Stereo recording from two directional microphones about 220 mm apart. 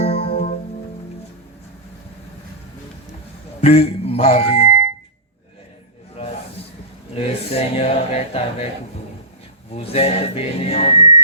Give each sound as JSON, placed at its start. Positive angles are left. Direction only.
{"t": 0.0, "sound": "music", "side_deg": 30}
{"t": 3.6, "sound": "speech", "side_deg": 25}
{"t": 7.1, "sound": "speech", "side_deg": 25}
{"t": 9.6, "sound": "speech", "side_deg": 25}